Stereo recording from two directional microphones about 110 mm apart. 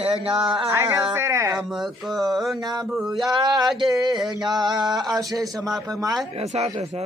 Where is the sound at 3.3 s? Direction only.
40° right (ahead or behind).